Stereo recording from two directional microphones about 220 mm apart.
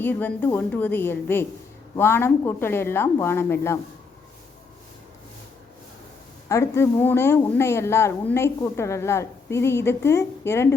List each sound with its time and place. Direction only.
0.0 s speech: 10° left (ahead or behind)
6.5 s speech: 10° left (ahead or behind)